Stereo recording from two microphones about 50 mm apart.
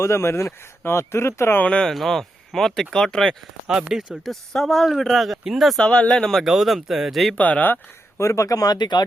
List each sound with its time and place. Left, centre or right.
0.0 s speech: left
1.6 s speech: left
1.9 s speech: centre
3.7 s speech: centre
4.2 s speech: centre
5.8 s speech: left
6.4 s speech: centre
7.3 s speech: left
8.2 s speech: left